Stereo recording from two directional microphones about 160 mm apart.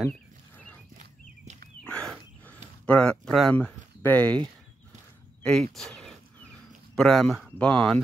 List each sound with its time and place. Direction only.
0.0 s a sound: 5° left (ahead or behind)
0.9 s walk: 45° right (ahead or behind)
1.9 s wild animals: 5° left (ahead or behind)
2.9 s speech: 5° left (ahead or behind)
5.4 s a sound: 5° left (ahead or behind)
7.0 s speech: centre (ahead or behind)